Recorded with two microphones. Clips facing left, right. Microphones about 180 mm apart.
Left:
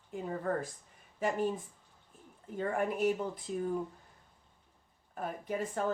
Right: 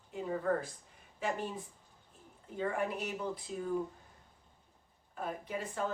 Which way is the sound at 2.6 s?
50° left (ahead or behind).